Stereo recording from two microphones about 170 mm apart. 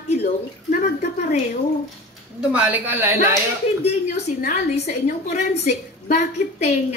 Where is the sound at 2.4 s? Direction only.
10° right (ahead or behind).